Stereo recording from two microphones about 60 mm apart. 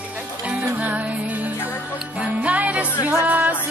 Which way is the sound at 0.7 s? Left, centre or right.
Right.